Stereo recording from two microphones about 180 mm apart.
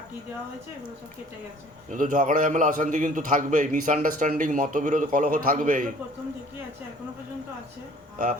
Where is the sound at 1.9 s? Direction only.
45° right (ahead or behind).